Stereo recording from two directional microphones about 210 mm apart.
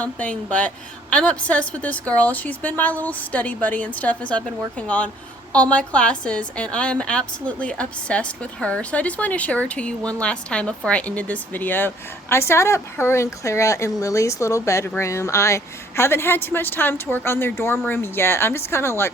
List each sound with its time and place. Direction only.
0.0 s a woman's voice: 5° left (ahead or behind)